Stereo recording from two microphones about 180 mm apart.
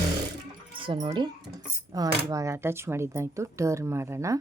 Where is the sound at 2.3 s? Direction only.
15° right (ahead or behind).